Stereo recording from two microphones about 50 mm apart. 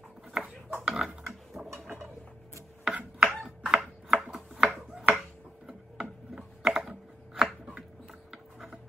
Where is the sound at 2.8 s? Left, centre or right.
Right.